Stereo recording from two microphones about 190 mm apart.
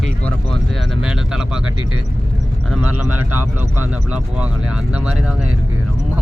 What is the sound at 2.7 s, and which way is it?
Speech, 5° right (ahead or behind).